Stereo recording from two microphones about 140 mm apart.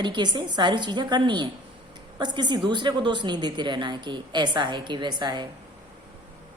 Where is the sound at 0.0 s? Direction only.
30° right (ahead or behind).